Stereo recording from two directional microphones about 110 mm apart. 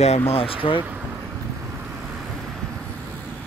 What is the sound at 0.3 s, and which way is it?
Speech, 55° left (ahead or behind).